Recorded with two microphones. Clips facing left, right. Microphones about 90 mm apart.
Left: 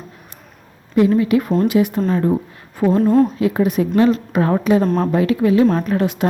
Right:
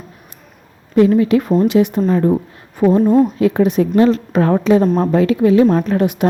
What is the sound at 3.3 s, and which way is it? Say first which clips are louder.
A woman's voice: right 3 dB; 30° right (ahead or behind).